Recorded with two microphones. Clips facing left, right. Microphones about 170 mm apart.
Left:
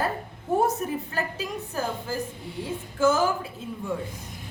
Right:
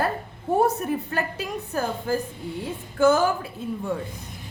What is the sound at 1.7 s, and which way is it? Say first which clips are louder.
Speech: right 3 dB; 60° right (ahead or behind).